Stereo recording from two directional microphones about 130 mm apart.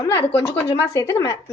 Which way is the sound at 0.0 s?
20° left (ahead or behind).